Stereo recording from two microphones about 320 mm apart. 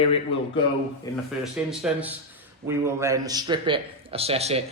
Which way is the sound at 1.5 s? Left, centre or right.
Centre.